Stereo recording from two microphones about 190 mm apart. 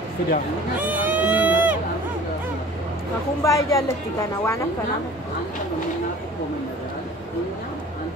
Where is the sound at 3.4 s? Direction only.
15° left (ahead or behind).